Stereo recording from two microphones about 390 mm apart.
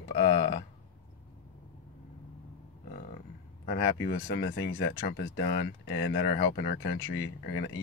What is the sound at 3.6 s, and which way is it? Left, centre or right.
Speech, left.